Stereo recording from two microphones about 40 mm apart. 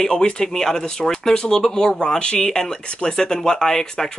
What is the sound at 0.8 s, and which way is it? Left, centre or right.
Speech, left.